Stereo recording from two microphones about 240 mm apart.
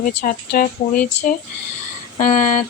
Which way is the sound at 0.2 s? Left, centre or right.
Left.